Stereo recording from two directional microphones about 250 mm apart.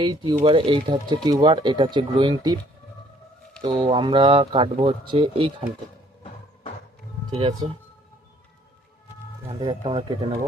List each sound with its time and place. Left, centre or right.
0.0 s speech: centre
3.6 s speech: centre
7.3 s speech: centre
9.5 s speech: centre